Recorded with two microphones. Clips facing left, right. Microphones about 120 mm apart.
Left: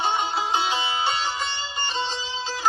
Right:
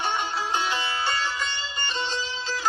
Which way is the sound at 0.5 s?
25° left (ahead or behind).